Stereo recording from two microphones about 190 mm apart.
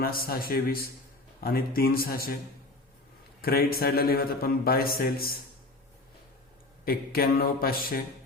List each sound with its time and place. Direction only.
0.0 s a man's voice: 50° left (ahead or behind)
3.4 s a man's voice: 55° left (ahead or behind)
6.8 s a man's voice: 50° left (ahead or behind)